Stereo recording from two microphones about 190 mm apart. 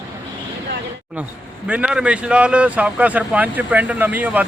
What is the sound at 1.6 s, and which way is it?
A man's voice, 5° right (ahead or behind).